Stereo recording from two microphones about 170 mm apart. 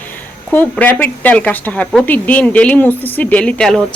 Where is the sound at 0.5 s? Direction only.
10° left (ahead or behind).